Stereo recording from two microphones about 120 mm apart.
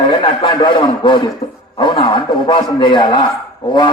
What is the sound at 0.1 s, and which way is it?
A man's voice, 40° left (ahead or behind).